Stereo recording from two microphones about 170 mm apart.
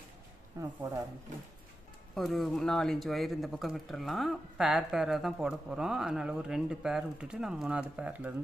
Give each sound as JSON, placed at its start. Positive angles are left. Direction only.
{"t": 0.6, "sound": "speech", "side_deg": -20}
{"t": 2.1, "sound": "speech", "side_deg": 0}